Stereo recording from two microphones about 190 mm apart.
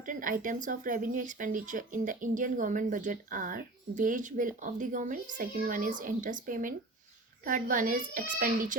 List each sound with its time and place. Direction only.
0.0 s speech: 45° right (ahead or behind)